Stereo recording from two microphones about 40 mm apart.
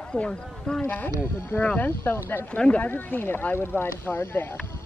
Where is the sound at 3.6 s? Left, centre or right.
Left.